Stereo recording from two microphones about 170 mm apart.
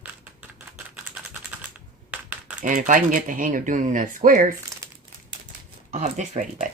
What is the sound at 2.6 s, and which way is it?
Speech, 50° right (ahead or behind).